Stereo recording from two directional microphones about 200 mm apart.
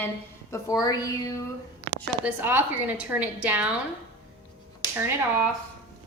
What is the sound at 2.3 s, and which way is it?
A woman's voice, 10° right (ahead or behind).